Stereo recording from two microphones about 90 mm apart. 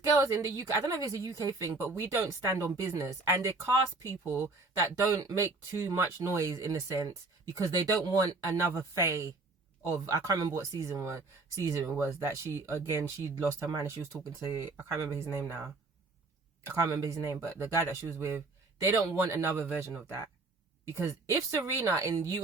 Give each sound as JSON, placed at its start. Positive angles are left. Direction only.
{"t": 0.0, "sound": "speech", "side_deg": -35}